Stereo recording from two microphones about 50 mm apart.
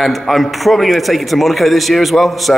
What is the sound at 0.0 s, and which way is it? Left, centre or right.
A man's voice, centre.